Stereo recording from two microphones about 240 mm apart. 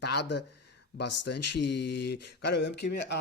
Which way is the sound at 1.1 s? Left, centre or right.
Left.